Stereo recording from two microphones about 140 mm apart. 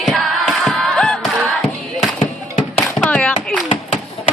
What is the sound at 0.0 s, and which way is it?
Music, centre (ahead or behind).